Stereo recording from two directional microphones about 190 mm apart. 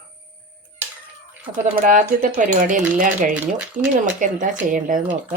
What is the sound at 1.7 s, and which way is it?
Speech, 45° right (ahead or behind).